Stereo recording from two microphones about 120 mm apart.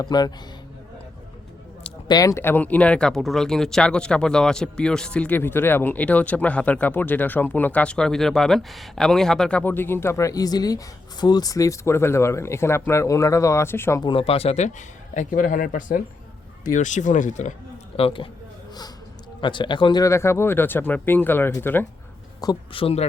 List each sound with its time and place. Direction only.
0.0 s speech: 35° left (ahead or behind)
2.0 s speech: 30° left (ahead or behind)
14.0 s speech: 50° left (ahead or behind); by 17.5 s 90° left
17.9 s a man's voice: 50° left (ahead or behind)
19.4 s speech: 40° left (ahead or behind)
20.1 s speech: 20° left (ahead or behind)
22.7 s speech: 55° left (ahead or behind)